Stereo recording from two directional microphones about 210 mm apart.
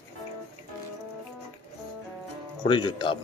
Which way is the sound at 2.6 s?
20° left (ahead or behind).